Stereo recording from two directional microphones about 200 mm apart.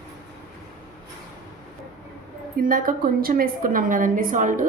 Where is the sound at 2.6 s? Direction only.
45° right (ahead or behind).